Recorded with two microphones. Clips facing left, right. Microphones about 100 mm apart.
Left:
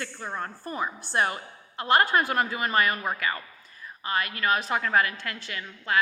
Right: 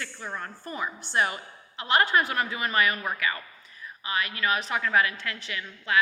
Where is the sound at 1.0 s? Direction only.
40° left (ahead or behind).